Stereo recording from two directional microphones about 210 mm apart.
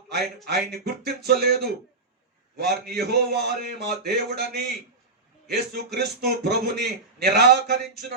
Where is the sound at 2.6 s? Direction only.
50° right (ahead or behind).